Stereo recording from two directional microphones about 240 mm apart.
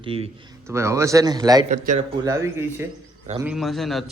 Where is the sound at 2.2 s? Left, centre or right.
Centre.